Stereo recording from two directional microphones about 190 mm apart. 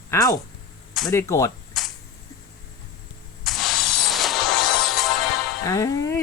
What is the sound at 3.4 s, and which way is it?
Music, centre (ahead or behind).